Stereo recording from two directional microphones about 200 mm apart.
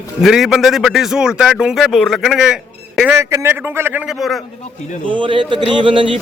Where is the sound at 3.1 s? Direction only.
15° right (ahead or behind).